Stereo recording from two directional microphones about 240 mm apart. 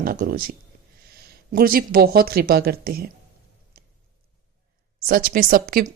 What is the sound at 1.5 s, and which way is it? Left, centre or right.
Speech, right.